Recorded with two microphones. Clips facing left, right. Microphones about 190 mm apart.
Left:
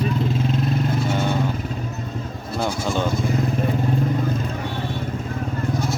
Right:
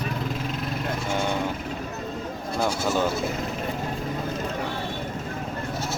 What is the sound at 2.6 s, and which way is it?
Speech, 10° right (ahead or behind).